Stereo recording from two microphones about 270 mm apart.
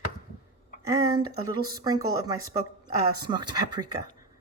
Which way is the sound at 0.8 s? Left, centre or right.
Centre.